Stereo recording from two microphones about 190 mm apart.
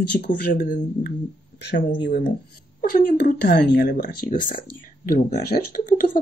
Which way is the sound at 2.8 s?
50° left (ahead or behind).